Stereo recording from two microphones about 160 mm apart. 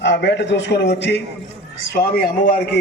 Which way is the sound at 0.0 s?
90° left.